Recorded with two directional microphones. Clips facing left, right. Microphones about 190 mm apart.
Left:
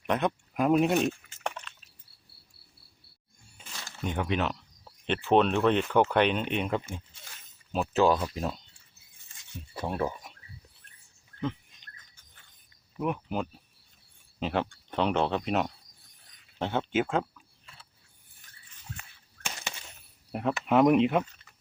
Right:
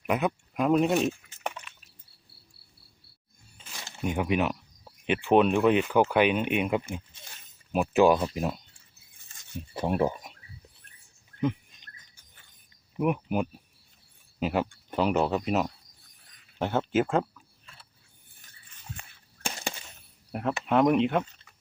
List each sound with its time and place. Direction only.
0.1 s liquid: 5° right (ahead or behind)
3.8 s a sound: 15° right (ahead or behind)
5.3 s speech: 10° right (ahead or behind)
9.7 s speech: 20° right (ahead or behind)
13.0 s speech: 15° right (ahead or behind)
20.3 s speech: centre (ahead or behind)